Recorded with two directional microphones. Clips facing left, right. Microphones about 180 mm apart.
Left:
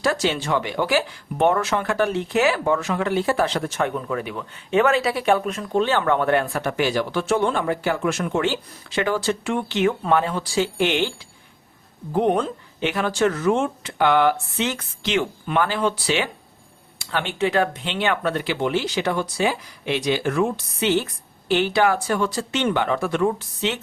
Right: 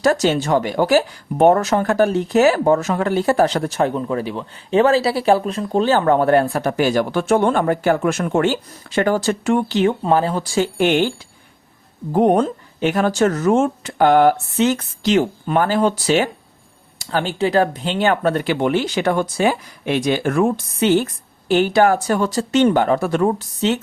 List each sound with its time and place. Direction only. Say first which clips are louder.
0.0 s speech: right 6 dB; 45° right (ahead or behind)
12.1 s speech: right 5 dB; 45° right (ahead or behind)